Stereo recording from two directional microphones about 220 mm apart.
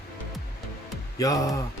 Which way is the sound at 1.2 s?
15° left (ahead or behind).